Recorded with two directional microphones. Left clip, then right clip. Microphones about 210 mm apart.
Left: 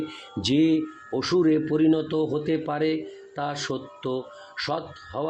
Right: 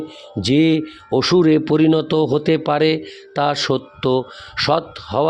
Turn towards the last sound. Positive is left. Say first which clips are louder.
# right 12 dB
turn(degrees=-55)  # may be behind; listen again after turning